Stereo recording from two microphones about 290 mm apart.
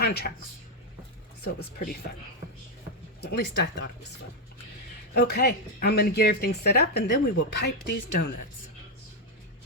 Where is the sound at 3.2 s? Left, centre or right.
Left.